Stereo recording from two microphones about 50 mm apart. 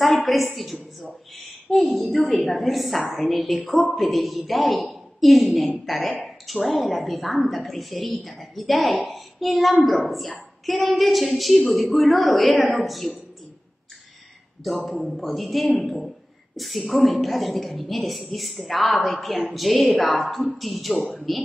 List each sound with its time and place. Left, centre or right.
0.0 s a woman's voice: centre
14.9 s a woman's voice: centre
15.8 s a sound: centre
16.5 s a woman's voice: centre